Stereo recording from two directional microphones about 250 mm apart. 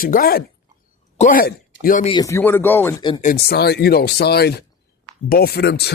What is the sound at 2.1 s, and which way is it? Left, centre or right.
Speech, centre.